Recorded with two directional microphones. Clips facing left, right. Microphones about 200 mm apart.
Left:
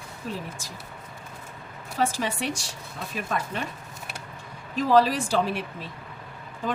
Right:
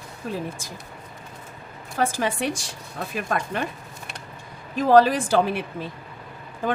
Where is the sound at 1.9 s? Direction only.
55° right (ahead or behind).